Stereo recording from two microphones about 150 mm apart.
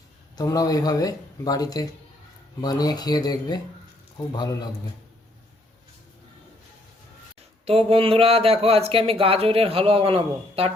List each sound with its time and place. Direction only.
0.3 s speech: 25° left (ahead or behind)
7.6 s speech: 40° right (ahead or behind)